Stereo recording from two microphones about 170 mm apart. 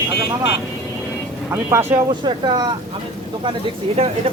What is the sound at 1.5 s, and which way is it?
Speech, 15° right (ahead or behind).